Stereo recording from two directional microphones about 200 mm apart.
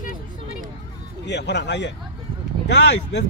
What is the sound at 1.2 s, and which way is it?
A man's voice, 60° left (ahead or behind).